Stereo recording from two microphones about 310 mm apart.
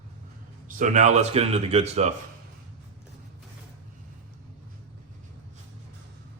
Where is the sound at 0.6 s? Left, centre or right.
Right.